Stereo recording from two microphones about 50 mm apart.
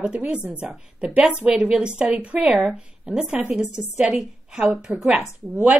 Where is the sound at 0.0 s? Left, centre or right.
Right.